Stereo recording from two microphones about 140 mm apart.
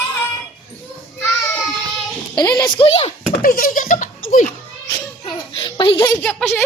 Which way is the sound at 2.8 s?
45° left (ahead or behind).